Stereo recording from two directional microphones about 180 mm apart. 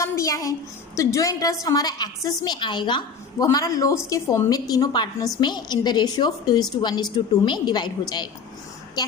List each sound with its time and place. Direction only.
0.0 s a woman's voice: 15° left (ahead or behind)